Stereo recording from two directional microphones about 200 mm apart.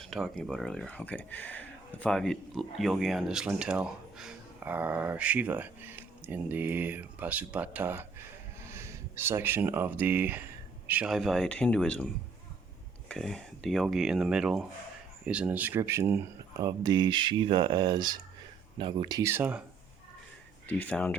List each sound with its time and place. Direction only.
0.0 s speech: centre (ahead or behind)
13.1 s speech: centre (ahead or behind)
20.7 s speech: 5° left (ahead or behind)